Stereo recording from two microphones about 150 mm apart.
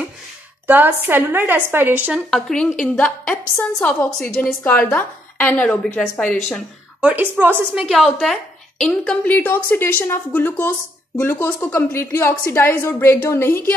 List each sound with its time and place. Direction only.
0.7 s a woman's voice: 10° right (ahead or behind)
2.3 s a woman's voice: 5° left (ahead or behind)
7.0 s a woman's voice: 10° right (ahead or behind)
7.8 s a woman's voice: centre (ahead or behind); by 13.6 s 15° left (ahead or behind)